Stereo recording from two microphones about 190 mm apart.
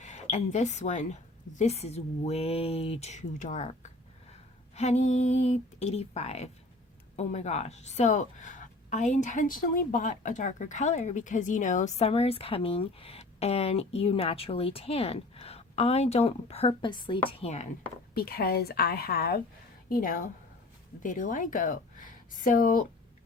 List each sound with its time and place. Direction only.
0.0 s a woman's voice: 35° left (ahead or behind)
17.4 s a woman's voice: 35° left (ahead or behind)
18.1 s a woman's voice: 55° left (ahead or behind)